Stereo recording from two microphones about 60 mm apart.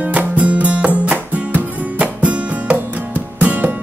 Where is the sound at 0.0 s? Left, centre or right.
Right.